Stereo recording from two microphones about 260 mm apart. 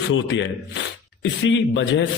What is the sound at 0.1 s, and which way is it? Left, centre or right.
A man's voice, left.